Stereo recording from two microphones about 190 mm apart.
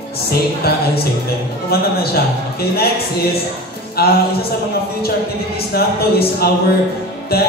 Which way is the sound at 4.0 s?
55° left (ahead or behind).